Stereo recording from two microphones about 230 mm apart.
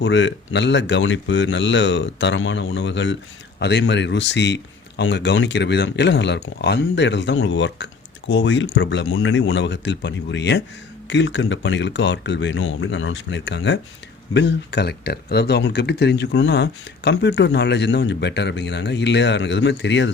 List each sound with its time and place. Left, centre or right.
0.0 s speech: left